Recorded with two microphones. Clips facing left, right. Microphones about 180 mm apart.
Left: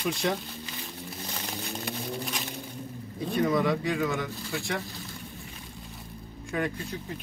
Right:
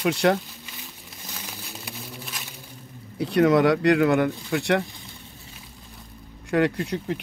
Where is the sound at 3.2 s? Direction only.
75° right (ahead or behind).